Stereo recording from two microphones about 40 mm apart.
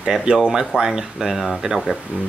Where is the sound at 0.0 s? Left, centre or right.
Centre.